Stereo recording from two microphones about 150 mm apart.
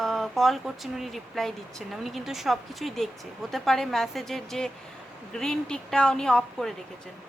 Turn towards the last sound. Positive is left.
turn(degrees=5)  # may be behind; listen again after turning